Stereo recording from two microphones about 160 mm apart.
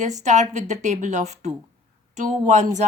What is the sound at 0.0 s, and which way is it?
A woman's voice, 50° right (ahead or behind).